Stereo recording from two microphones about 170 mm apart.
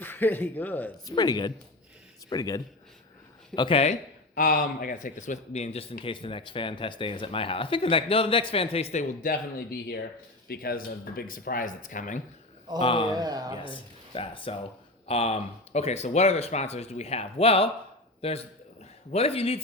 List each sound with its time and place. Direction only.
0.0 s speech: 10° left (ahead or behind)
1.0 s a man's voice: 25° left (ahead or behind)
4.4 s a man's voice: 55° left (ahead or behind)
9.6 s speech: 70° left (ahead or behind); by 12.2 s 50° left (ahead or behind)
12.8 s a man's voice: 30° left (ahead or behind)
13.1 s speech: 25° right (ahead or behind)
13.6 s a man's voice: 30° left (ahead or behind)